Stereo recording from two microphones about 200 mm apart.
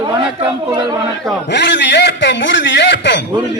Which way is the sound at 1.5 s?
60° left (ahead or behind).